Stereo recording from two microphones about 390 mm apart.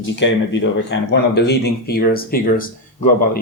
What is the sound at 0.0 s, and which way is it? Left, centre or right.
Speech, left.